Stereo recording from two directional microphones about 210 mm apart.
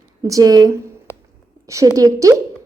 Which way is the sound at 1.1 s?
10° left (ahead or behind).